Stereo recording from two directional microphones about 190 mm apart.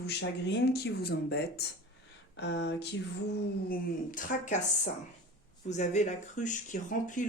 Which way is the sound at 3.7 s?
45° left (ahead or behind).